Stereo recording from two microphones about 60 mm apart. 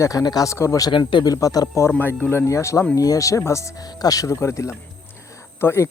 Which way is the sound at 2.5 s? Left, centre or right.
Left.